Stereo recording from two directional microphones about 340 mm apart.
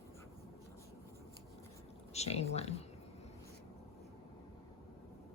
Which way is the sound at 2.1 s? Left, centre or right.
Centre.